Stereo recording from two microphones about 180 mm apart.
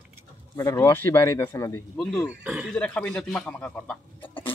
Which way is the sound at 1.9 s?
5° left (ahead or behind).